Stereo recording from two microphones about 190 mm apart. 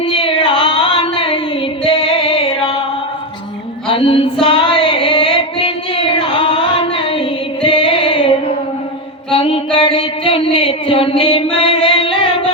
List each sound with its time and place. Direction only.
0.0 s a sound: 25° left (ahead or behind)
1.8 s singing: 30° left (ahead or behind)
3.9 s music: 30° left (ahead or behind)
4.4 s child singing: 25° left (ahead or behind)
6.1 s music: 25° left (ahead or behind)
9.3 s a sound: 25° left (ahead or behind)
11.5 s singing: 30° left (ahead or behind)